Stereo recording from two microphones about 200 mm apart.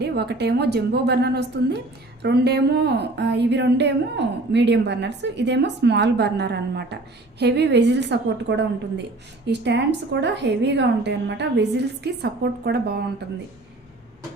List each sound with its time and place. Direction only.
0.0 s a woman's voice: 55° right (ahead or behind)